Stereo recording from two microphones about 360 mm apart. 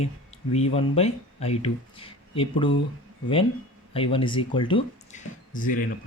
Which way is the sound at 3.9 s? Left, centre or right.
Centre.